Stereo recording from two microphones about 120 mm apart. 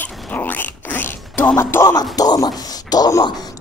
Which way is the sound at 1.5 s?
25° left (ahead or behind).